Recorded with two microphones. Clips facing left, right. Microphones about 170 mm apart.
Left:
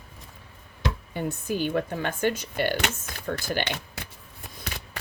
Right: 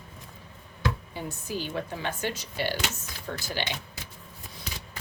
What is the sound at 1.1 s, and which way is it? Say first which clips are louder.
Speech: left 5 dB; 55° left (ahead or behind).